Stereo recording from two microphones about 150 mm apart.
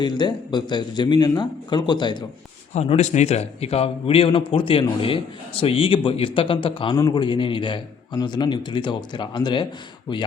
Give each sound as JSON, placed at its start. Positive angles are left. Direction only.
{"t": 0.0, "sound": "speech", "side_deg": 30}
{"t": 2.7, "sound": "a man's voice", "side_deg": 45}